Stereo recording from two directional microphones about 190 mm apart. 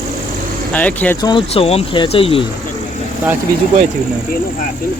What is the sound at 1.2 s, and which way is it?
Speech, 25° left (ahead or behind).